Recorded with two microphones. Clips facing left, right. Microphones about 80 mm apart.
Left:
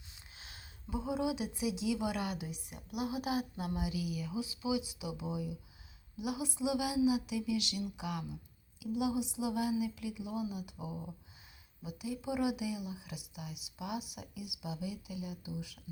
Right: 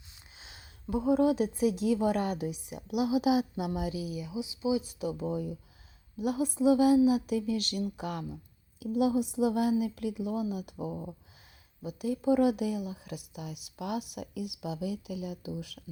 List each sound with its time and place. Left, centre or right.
0.9 s speech: right
2.5 s speech: right
3.9 s speech: right
4.3 s speech: centre
4.7 s speech: right